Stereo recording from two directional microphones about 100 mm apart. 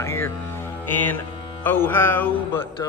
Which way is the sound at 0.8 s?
20° left (ahead or behind).